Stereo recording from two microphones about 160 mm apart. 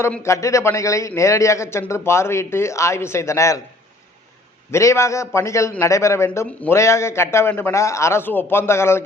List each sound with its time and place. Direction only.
0.0 s a man's voice: 15° left (ahead or behind)
4.7 s a man's voice: 20° left (ahead or behind)